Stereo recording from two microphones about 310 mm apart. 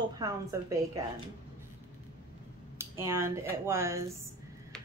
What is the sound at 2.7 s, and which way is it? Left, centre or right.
Speech, centre.